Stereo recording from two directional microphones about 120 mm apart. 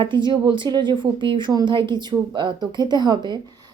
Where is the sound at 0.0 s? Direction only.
40° right (ahead or behind).